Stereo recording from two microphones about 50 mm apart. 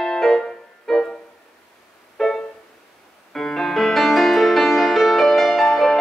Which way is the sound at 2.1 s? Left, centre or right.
Centre.